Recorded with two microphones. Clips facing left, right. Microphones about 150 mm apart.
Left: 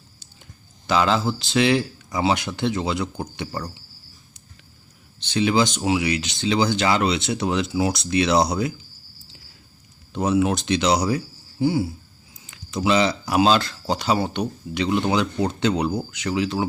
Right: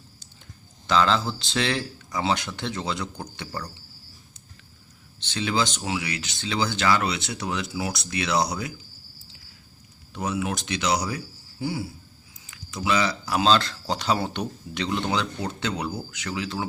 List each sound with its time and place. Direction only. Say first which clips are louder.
0.9 s speech: left 2 dB; 15° left (ahead or behind)
5.2 s speech: left 6 dB; 15° left (ahead or behind)
10.1 s speech: left 8 dB; 30° left (ahead or behind)